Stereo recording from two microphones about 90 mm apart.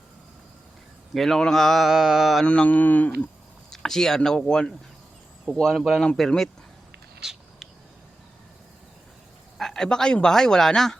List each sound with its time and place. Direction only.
1.1 s speech: 5° left (ahead or behind)
2.5 s speech: 15° left (ahead or behind)
3.7 s speech: 5° left (ahead or behind)
7.2 s a sound: 5° right (ahead or behind)
9.6 s speech: 5° left (ahead or behind)